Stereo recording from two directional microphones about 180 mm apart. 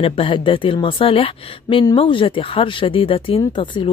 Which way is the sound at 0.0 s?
30° left (ahead or behind).